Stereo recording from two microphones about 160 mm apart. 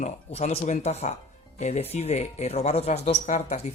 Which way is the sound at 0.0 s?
45° left (ahead or behind).